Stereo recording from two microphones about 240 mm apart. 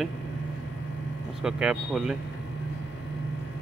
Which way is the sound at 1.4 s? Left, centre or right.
Centre.